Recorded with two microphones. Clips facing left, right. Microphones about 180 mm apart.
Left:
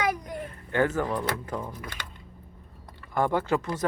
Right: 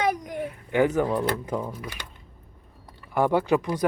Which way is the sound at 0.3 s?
10° right (ahead or behind).